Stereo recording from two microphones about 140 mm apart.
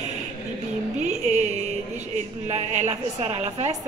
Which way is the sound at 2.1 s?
55° right (ahead or behind).